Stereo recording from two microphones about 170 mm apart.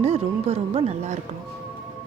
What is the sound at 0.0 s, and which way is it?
Speech, 35° right (ahead or behind).